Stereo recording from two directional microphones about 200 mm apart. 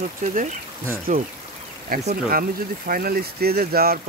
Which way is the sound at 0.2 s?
40° right (ahead or behind).